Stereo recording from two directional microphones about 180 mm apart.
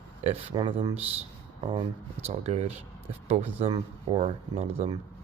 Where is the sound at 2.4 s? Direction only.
35° right (ahead or behind).